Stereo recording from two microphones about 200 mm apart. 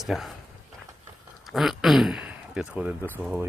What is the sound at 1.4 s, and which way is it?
Speech, centre (ahead or behind).